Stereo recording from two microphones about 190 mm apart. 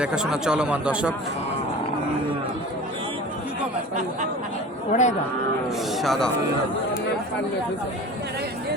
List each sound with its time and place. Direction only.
0.0 s speech: 5° right (ahead or behind)
4.9 s speech: 40° left (ahead or behind)
6.0 s speech: centre (ahead or behind)